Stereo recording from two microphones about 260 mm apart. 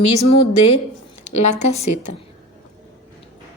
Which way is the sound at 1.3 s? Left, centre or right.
Left.